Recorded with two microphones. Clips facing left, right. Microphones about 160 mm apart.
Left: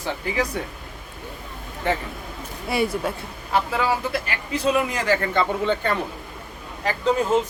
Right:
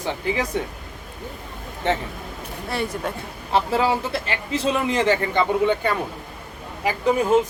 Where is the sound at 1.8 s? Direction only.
25° right (ahead or behind).